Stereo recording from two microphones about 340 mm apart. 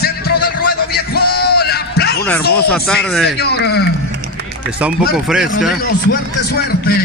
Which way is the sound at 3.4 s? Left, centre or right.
Left.